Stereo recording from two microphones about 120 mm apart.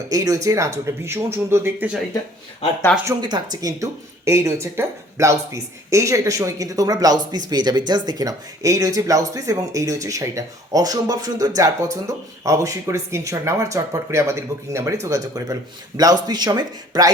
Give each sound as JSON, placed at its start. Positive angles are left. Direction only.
{"t": 0.1, "sound": "speech", "side_deg": -30}
{"t": 3.0, "sound": "speech", "side_deg": -25}
{"t": 3.2, "sound": "a man's voice", "side_deg": -35}